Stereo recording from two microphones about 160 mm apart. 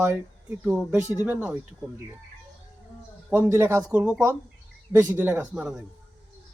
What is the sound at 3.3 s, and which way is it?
Speech, 15° right (ahead or behind).